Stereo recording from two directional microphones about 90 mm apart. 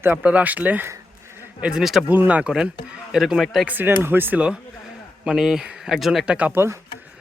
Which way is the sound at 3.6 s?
20° right (ahead or behind).